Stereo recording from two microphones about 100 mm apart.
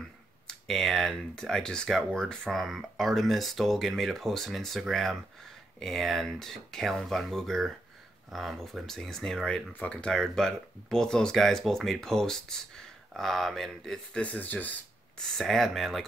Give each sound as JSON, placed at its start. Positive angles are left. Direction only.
{"t": 0.5, "sound": "speech", "side_deg": 5}
{"t": 9.7, "sound": "speech", "side_deg": 15}
{"t": 14.2, "sound": "speech", "side_deg": 15}
{"t": 15.1, "sound": "speech", "side_deg": 0}